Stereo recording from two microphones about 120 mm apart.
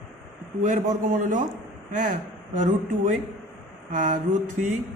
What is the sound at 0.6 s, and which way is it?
A man's voice, 90° right.